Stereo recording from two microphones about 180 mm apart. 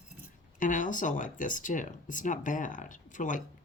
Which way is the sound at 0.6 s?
45° left (ahead or behind).